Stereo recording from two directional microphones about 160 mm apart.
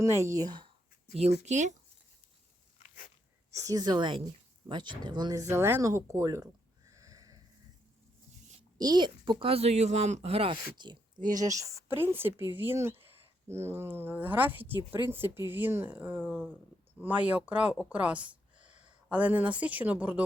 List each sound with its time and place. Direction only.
0.0 s speech: 20° right (ahead or behind)
1.2 s speech: 45° right (ahead or behind)
3.5 s speech: 20° right (ahead or behind)
8.8 s speech: 25° right (ahead or behind)
11.9 s speech: 15° right (ahead or behind)